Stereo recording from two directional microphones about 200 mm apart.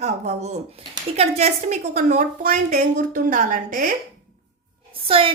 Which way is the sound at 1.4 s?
35° right (ahead or behind).